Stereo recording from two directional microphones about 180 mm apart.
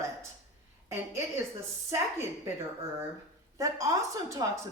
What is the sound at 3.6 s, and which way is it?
A woman's voice, 20° right (ahead or behind).